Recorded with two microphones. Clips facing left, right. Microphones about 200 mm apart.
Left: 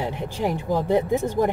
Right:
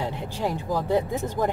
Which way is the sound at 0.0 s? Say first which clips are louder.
Left 2 dB; 15° left (ahead or behind).